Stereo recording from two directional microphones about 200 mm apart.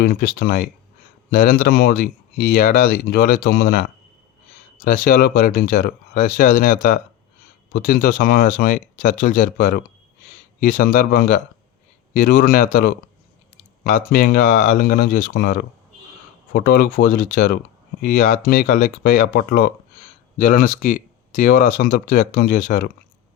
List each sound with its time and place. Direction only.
0.0 s speech: 50° left (ahead or behind)